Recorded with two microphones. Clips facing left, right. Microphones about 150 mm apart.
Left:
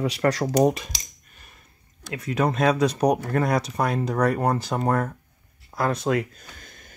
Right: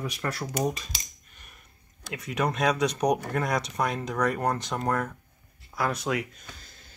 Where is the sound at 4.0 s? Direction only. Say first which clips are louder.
Left 5 dB; 35° left (ahead or behind).